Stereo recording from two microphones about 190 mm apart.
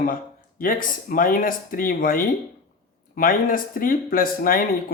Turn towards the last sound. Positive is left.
turn(degrees=50)  # may be behind; listen again after turning